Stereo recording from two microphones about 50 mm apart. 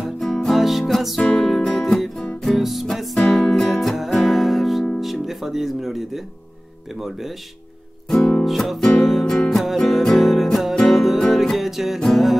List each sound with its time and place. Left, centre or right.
0.2 s music: centre
0.6 s music: centre
7.0 s speech: centre
8.5 s music: centre
8.8 s speech: centre
9.2 s music: centre
10.0 s music: centre
12.0 s speech: centre